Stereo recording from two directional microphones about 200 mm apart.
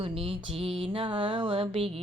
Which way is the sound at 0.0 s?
25° right (ahead or behind).